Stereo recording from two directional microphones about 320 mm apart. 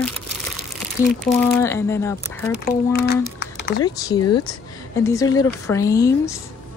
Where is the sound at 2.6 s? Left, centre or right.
Left.